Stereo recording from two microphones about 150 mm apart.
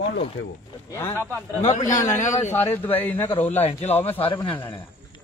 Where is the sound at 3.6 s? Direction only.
45° left (ahead or behind).